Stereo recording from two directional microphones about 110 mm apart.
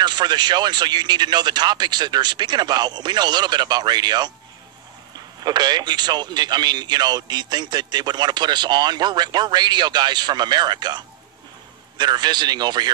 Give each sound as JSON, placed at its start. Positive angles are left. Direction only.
{"t": 0.0, "sound": "speech", "side_deg": -40}
{"t": 5.4, "sound": "speech", "side_deg": -40}